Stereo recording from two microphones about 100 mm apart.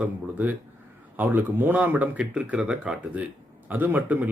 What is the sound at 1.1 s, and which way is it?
A man's voice, 20° right (ahead or behind).